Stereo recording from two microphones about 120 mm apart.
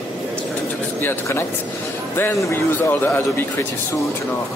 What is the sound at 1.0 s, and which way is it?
A man's voice, 20° left (ahead or behind).